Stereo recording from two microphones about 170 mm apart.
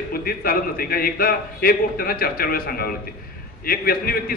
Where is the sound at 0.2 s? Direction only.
60° left (ahead or behind).